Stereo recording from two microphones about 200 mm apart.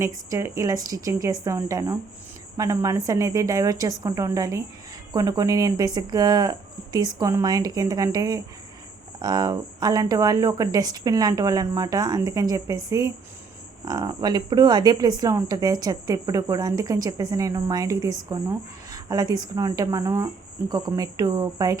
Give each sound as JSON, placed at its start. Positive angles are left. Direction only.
{"t": 0.0, "sound": "speech", "side_deg": -15}